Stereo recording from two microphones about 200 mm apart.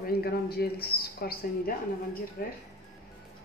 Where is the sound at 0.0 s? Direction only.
50° left (ahead or behind).